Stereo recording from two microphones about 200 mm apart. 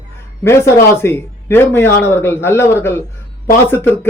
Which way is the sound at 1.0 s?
10° left (ahead or behind).